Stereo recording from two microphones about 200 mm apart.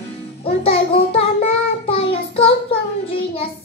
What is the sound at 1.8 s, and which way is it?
Child singing, 30° left (ahead or behind).